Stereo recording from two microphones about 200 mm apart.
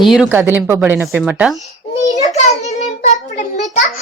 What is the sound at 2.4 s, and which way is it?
A child's voice, 35° left (ahead or behind).